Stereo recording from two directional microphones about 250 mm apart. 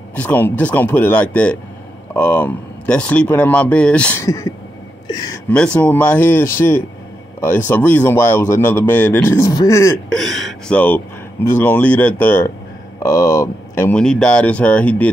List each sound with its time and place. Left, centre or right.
0.1 s a man's voice: centre
10.1 s a man's voice: centre